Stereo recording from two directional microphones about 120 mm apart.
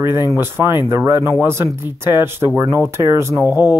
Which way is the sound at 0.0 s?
20° right (ahead or behind).